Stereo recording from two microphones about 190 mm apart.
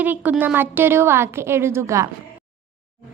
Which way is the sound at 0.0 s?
10° right (ahead or behind).